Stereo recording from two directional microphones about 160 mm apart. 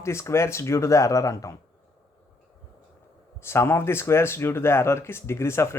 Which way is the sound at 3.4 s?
15° left (ahead or behind).